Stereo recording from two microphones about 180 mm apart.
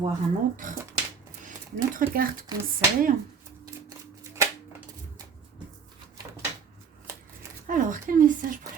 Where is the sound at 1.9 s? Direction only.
50° right (ahead or behind).